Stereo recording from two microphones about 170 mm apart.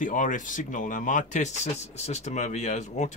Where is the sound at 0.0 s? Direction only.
50° left (ahead or behind).